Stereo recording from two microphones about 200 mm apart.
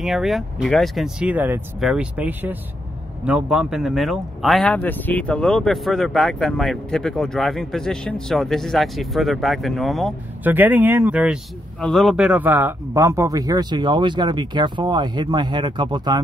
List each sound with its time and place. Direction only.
0.0 s speech: centre (ahead or behind); by 16.2 s 20° right (ahead or behind)